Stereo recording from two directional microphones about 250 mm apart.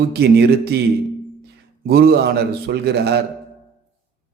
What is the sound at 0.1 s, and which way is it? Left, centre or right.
Speech, right.